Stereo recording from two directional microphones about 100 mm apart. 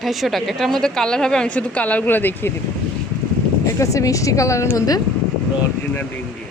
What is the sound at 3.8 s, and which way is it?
Speech, 30° left (ahead or behind).